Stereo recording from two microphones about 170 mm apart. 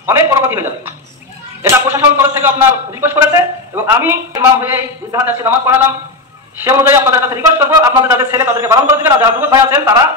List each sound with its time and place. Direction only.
0.0 s a man's voice: 15° right (ahead or behind)